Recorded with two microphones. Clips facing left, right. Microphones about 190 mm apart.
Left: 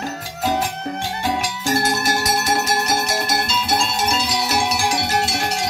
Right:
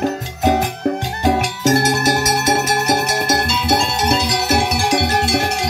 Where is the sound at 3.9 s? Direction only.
65° right (ahead or behind).